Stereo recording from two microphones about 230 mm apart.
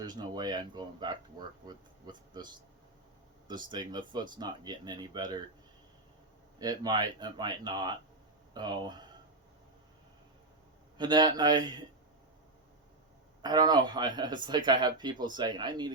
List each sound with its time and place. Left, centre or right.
0.0 s speech: centre
3.5 s speech: centre
6.6 s speech: centre
10.9 s speech: centre
13.4 s speech: centre